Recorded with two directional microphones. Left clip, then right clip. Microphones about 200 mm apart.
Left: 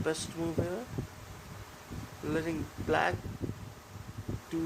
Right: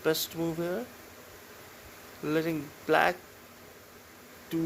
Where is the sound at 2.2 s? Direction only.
20° right (ahead or behind).